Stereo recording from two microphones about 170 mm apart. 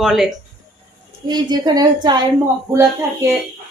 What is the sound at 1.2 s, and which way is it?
A woman's voice, 25° right (ahead or behind).